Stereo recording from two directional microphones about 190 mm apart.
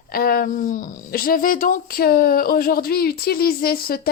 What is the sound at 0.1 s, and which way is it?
Speech, 50° left (ahead or behind).